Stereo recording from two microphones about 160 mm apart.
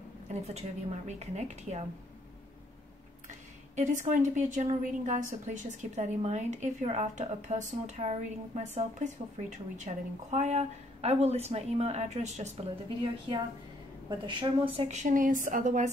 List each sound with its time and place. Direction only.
0.3 s speech: 45° right (ahead or behind)
3.3 s speech: 50° right (ahead or behind)
14.0 s speech: 30° right (ahead or behind); by 15.9 s 50° right (ahead or behind)